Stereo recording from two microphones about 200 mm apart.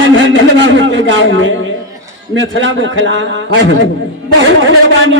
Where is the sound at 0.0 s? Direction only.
65° right (ahead or behind).